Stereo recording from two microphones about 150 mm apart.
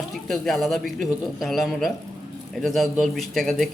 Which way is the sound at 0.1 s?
Centre (ahead or behind).